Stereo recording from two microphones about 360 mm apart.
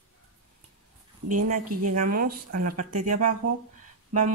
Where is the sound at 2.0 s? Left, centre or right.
Right.